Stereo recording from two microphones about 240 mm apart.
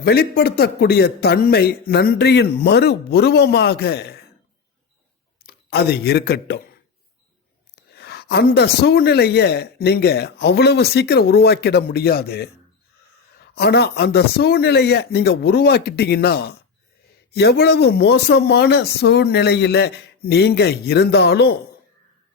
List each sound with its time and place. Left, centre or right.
0.0 s speech: left
5.5 s speech: left
7.8 s speech: left
13.6 s speech: left